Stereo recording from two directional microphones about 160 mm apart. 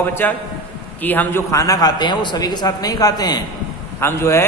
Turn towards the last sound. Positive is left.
turn(degrees=15)  # may be behind; listen again after turning